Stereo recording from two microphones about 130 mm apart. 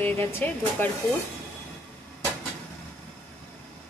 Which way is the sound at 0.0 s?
15° left (ahead or behind).